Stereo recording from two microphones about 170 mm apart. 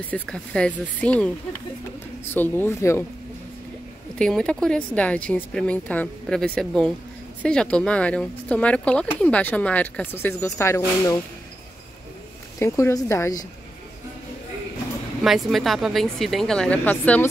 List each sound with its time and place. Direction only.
0.1 s speech: 5° left (ahead or behind)
4.2 s a woman's voice: 5° left (ahead or behind)
12.5 s speech: 15° left (ahead or behind)
15.2 s a woman's voice: centre (ahead or behind)